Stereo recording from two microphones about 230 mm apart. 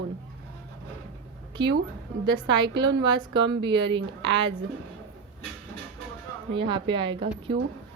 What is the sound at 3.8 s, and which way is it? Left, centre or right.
Speech, right.